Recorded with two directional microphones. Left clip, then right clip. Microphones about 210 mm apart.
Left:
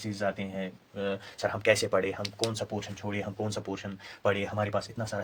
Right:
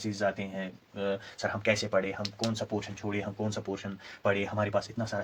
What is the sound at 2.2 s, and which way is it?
Speech, 30° left (ahead or behind).